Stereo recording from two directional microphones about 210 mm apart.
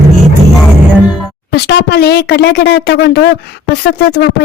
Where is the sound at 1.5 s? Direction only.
50° left (ahead or behind).